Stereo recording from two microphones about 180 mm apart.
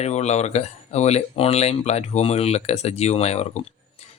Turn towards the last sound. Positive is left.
turn(degrees=35)  # may be behind; listen again after turning